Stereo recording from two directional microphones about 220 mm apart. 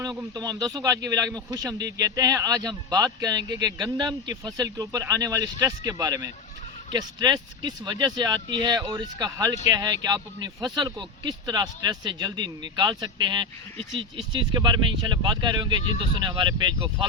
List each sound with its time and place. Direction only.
0.0 s speech: 15° right (ahead or behind)